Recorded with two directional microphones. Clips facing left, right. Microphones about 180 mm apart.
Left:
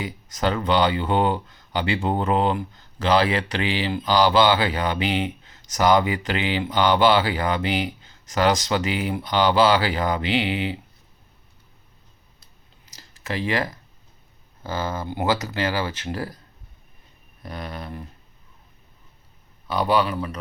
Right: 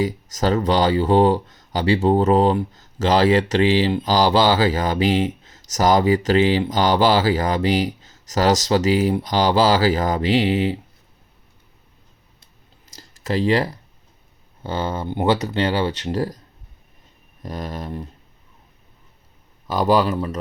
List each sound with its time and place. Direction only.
0.0 s speech: 40° right (ahead or behind)
13.0 s a sound: 40° right (ahead or behind)
14.6 s speech: 30° right (ahead or behind)
17.4 s speech: 40° right (ahead or behind)
19.6 s a man's voice: 40° right (ahead or behind)